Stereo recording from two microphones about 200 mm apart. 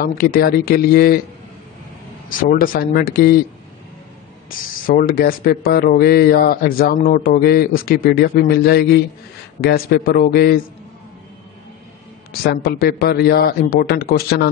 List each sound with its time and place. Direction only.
0.0 s speech: 50° left (ahead or behind)
2.2 s speech: 45° left (ahead or behind)
4.5 s speech: 45° left (ahead or behind)
12.3 s speech: 50° left (ahead or behind)